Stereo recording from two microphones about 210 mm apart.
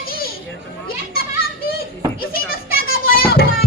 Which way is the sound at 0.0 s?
45° left (ahead or behind).